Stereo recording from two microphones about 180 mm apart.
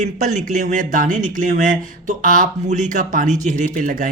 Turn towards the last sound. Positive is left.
turn(degrees=-45)  # may be behind; listen again after turning